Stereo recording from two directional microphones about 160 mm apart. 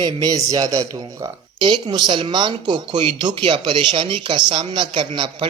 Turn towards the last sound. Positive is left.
turn(degrees=-30)  # may be behind; listen again after turning